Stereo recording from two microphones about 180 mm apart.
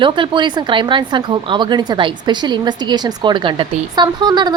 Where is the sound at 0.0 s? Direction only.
25° right (ahead or behind).